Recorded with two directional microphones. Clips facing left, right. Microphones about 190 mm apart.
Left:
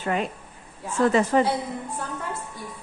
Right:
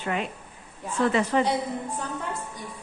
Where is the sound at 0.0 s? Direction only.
40° left (ahead or behind).